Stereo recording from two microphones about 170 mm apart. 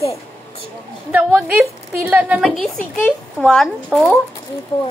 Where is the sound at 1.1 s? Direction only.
10° right (ahead or behind).